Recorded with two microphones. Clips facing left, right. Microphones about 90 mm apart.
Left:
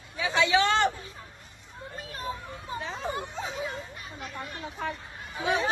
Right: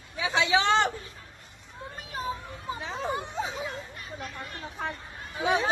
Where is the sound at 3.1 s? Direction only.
20° right (ahead or behind).